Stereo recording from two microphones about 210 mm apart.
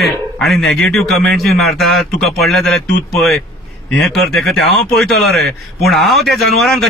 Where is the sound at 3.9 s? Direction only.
Centre (ahead or behind).